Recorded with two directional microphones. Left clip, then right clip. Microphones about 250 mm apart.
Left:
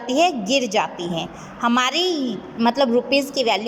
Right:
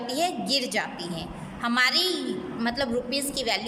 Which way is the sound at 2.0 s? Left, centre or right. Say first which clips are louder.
Left 4 dB; centre.